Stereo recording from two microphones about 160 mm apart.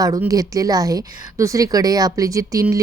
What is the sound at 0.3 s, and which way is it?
A woman's voice, 20° right (ahead or behind).